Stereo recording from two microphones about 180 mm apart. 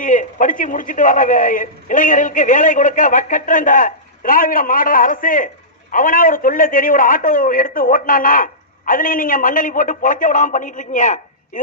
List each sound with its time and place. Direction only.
0.0 s a man's voice: 45° left (ahead or behind)